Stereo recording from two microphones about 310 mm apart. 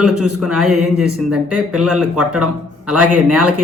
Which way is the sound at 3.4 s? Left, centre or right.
Right.